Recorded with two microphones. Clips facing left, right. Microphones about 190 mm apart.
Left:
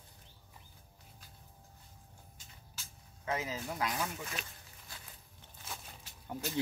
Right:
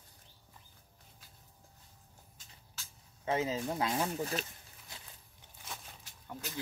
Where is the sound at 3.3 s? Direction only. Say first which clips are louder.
Right 5 dB; 30° right (ahead or behind).